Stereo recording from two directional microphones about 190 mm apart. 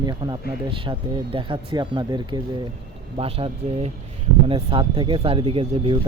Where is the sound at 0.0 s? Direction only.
20° right (ahead or behind).